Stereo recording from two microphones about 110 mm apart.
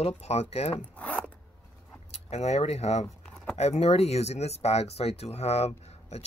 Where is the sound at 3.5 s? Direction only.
70° left (ahead or behind).